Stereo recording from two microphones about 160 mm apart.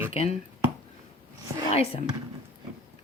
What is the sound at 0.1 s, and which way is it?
Speech, 40° left (ahead or behind).